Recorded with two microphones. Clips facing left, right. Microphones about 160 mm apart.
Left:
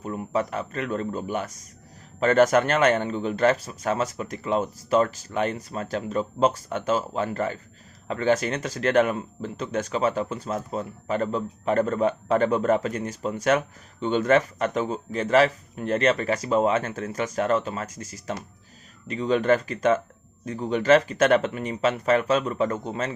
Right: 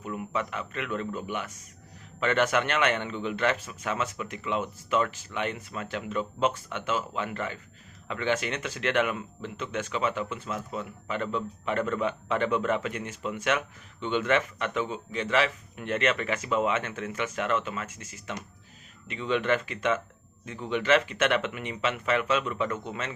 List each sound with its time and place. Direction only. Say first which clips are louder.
0.0 s speech: left 5 dB; 35° left (ahead or behind)